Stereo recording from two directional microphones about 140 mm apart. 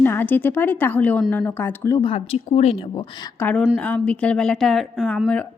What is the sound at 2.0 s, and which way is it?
A woman's voice, 40° left (ahead or behind).